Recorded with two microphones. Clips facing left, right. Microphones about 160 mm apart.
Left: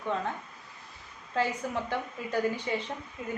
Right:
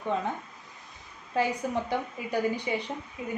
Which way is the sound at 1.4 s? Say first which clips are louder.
Right 2 dB; 15° right (ahead or behind).